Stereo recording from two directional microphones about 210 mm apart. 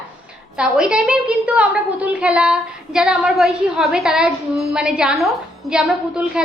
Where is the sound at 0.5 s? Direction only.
5° right (ahead or behind).